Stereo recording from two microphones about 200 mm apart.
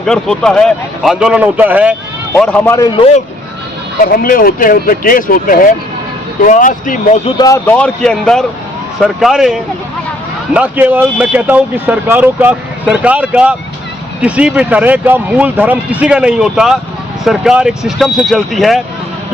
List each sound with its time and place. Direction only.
0.0 s a man's voice: 5° left (ahead or behind)
2.3 s speech: 5° left (ahead or behind)
4.0 s speech: 45° left (ahead or behind)
7.3 s a man's voice: 20° left (ahead or behind); by 18.8 s centre (ahead or behind)